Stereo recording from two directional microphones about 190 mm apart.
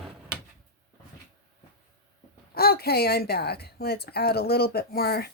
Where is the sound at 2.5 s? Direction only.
55° left (ahead or behind).